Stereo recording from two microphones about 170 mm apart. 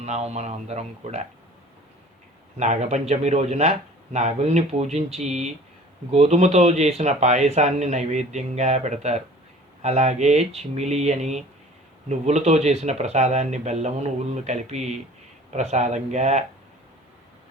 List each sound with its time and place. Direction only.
0.0 s speech: 40° right (ahead or behind)
2.6 s speech: 45° right (ahead or behind)